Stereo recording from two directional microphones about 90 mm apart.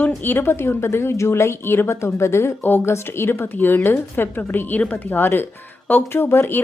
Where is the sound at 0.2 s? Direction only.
25° left (ahead or behind).